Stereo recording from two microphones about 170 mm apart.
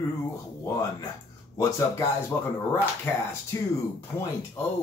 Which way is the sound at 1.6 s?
15° left (ahead or behind).